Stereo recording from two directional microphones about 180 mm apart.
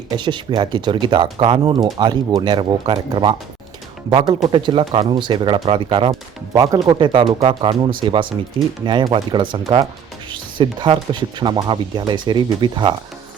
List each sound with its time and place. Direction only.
0.2 s speech: 25° right (ahead or behind)